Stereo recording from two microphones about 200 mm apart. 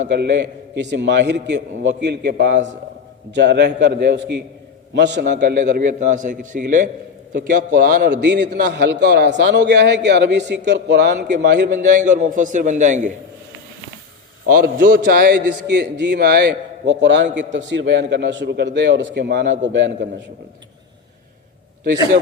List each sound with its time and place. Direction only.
0.1 s a man's voice: 60° right (ahead or behind)
5.5 s a man's voice: 40° right (ahead or behind); by 11.3 s 60° right (ahead or behind)
12.0 s a man's voice: 40° right (ahead or behind)
14.4 s a man's voice: 45° right (ahead or behind); by 20.1 s 65° right (ahead or behind)